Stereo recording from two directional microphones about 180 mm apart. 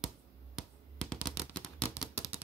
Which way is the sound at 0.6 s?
5° left (ahead or behind).